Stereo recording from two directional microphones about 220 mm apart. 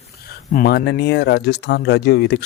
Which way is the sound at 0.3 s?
45° left (ahead or behind).